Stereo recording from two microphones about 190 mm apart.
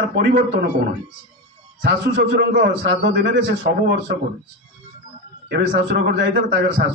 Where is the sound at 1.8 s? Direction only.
65° right (ahead or behind).